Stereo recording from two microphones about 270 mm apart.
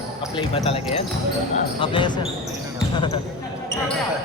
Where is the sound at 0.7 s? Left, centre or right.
Left.